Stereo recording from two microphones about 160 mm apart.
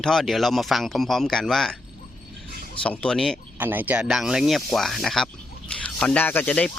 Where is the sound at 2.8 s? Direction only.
5° left (ahead or behind).